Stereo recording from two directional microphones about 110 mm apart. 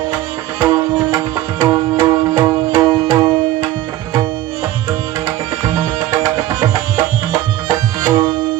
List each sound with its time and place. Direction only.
0.6 s music: 35° right (ahead or behind)
6.0 s music: 35° right (ahead or behind)